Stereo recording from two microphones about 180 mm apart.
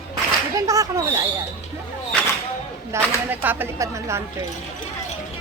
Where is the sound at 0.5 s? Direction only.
20° right (ahead or behind).